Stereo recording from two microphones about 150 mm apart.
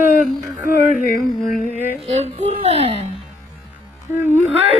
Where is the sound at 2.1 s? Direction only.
45° right (ahead or behind).